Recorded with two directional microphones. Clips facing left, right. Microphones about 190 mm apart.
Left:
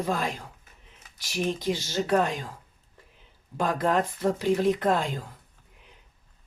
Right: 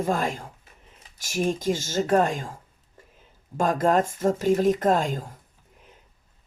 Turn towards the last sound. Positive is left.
turn(degrees=-45)  # may be behind; listen again after turning